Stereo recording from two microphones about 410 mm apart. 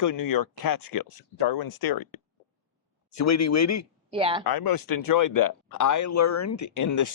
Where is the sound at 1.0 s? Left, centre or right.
Left.